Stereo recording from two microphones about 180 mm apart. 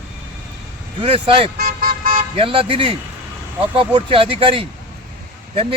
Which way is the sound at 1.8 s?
55° right (ahead or behind).